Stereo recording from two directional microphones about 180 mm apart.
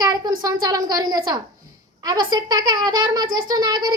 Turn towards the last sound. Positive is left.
turn(degrees=-20)  # may be behind; listen again after turning